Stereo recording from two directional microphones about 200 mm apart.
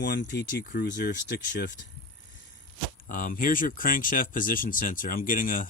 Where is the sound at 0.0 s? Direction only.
55° left (ahead or behind).